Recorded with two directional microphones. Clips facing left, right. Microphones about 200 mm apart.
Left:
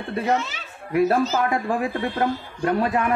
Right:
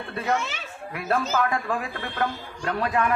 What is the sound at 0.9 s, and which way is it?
Speech, 25° left (ahead or behind).